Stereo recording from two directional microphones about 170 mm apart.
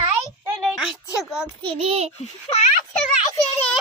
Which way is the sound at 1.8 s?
35° right (ahead or behind).